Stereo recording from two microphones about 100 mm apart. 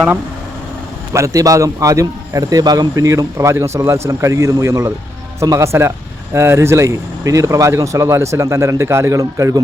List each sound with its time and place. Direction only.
1.1 s a man's voice: 35° right (ahead or behind)